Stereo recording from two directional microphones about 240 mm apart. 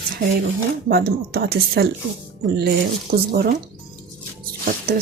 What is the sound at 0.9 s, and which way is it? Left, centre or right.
Speech, right.